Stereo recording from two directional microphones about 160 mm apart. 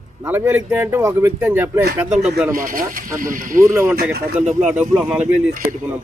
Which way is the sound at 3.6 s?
15° right (ahead or behind).